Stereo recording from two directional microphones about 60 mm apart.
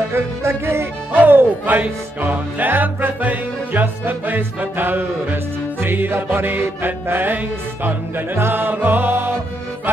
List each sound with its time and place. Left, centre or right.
0.1 s music: right
1.1 s music: right
8.4 s music: right